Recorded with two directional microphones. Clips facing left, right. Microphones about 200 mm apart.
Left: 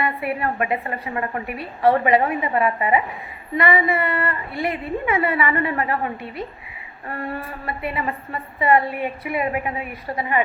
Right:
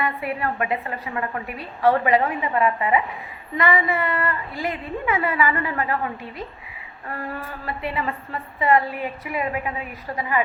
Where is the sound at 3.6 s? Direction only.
30° left (ahead or behind).